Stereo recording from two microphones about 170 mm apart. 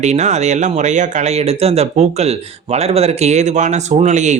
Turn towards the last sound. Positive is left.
turn(degrees=-45)  # may be behind; listen again after turning